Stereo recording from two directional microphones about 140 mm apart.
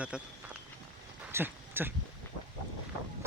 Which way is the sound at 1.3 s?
15° right (ahead or behind).